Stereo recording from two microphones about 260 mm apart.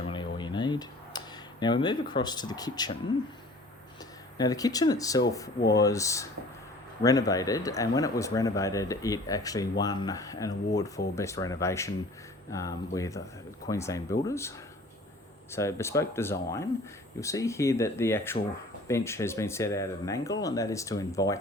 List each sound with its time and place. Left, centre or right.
0.1 s tick-tock: centre
4.4 s speech: centre
15.5 s speech: centre